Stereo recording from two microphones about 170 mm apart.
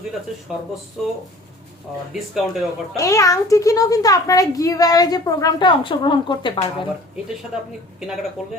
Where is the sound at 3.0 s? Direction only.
20° left (ahead or behind).